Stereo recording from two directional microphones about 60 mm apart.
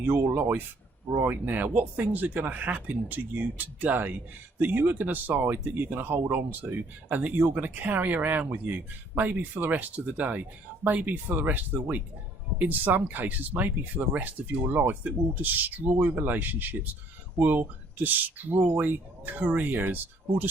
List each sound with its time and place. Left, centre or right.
0.0 s speech: right
1.5 s speech: right
18.5 s speech: right
18.8 s speech: right